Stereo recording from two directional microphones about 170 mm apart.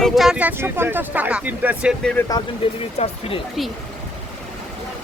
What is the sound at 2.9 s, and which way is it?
Speech, 35° left (ahead or behind).